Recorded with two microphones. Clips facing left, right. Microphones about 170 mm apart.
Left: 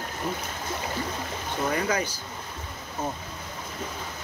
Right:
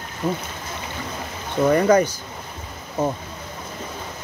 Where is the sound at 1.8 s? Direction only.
45° right (ahead or behind).